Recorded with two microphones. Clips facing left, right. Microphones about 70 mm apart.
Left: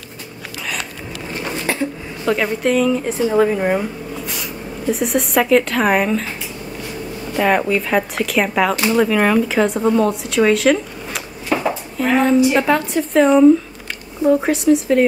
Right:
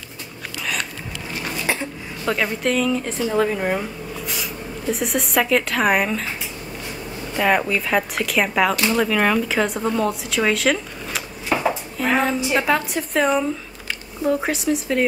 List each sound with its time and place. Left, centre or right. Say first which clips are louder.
1.7 s a sound: left 3 dB; centre
2.2 s speech: left 4 dB; centre
7.3 s speech: left 3 dB; centre